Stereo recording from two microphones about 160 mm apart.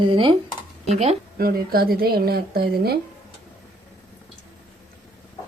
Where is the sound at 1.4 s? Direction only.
70° right (ahead or behind).